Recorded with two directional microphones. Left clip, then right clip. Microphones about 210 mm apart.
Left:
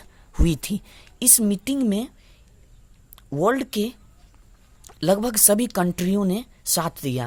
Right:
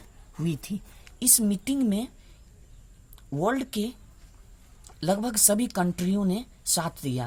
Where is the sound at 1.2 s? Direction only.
30° left (ahead or behind).